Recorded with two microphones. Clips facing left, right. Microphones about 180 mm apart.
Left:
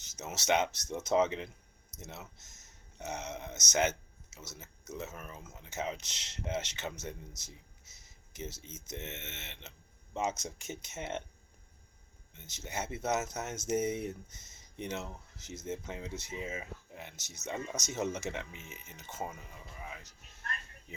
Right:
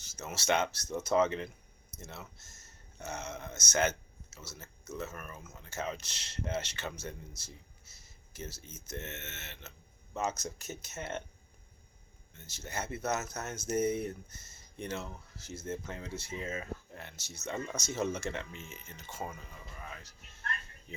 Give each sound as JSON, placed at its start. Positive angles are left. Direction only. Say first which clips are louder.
{"t": 0.0, "sound": "speech", "louder": "right 1 dB", "side_deg": 20}
{"t": 10.2, "sound": "speech", "louder": "even", "side_deg": 20}
{"t": 12.5, "sound": "speech", "louder": "even", "side_deg": 20}